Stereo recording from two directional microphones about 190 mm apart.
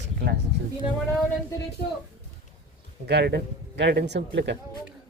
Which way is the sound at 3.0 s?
60° right (ahead or behind).